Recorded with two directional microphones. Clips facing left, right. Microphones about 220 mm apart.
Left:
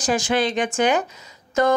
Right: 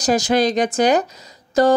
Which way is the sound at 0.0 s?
40° right (ahead or behind).